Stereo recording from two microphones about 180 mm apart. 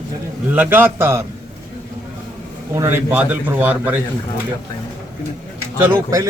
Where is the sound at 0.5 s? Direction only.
10° right (ahead or behind).